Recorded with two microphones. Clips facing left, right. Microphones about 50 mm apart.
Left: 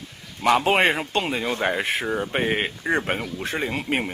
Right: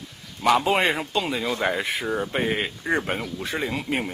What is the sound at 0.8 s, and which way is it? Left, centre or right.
Speech, left.